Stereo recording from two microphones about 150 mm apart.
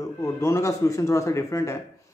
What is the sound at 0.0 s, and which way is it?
Speech, 20° left (ahead or behind).